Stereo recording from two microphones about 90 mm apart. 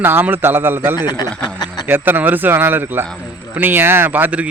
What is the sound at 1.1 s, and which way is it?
Speech, 50° left (ahead or behind).